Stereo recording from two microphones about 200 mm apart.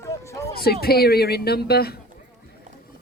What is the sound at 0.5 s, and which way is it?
Speech, 50° left (ahead or behind).